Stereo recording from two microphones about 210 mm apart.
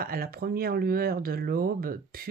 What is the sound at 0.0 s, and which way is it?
Speech, 45° right (ahead or behind).